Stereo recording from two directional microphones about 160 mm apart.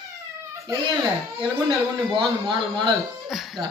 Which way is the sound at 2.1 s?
30° right (ahead or behind).